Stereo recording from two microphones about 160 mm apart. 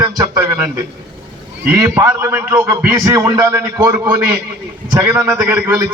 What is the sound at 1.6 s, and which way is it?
A man's voice, 15° right (ahead or behind).